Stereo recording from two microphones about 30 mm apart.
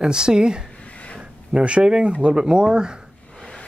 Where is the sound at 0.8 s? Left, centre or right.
Left.